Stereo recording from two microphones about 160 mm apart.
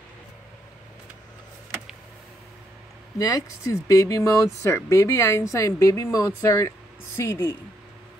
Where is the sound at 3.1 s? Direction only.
20° left (ahead or behind).